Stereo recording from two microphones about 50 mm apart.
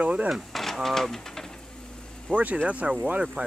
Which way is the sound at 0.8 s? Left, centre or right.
Centre.